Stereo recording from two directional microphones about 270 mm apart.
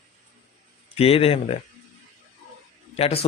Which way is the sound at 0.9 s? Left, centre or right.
Left.